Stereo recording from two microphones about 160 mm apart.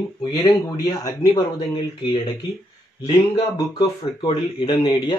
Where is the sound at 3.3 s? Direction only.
30° left (ahead or behind).